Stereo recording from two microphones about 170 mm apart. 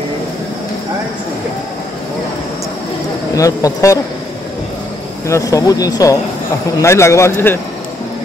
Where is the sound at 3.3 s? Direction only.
20° left (ahead or behind).